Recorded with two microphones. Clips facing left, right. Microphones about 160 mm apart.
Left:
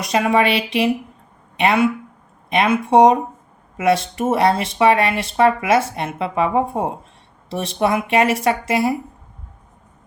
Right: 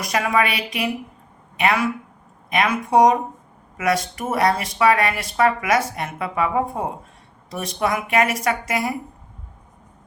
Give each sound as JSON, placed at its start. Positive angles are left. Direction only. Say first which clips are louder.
{"t": 0.0, "sound": "speech", "louder": "left 4 dB", "side_deg": 25}